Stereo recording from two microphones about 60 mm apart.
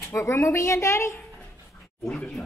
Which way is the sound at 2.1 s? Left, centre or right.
Left.